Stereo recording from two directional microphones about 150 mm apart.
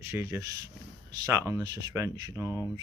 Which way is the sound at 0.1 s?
20° right (ahead or behind).